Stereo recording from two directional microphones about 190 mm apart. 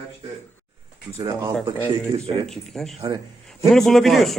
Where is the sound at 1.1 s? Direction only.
20° right (ahead or behind).